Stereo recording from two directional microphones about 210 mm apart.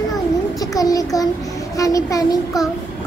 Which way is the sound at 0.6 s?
15° left (ahead or behind).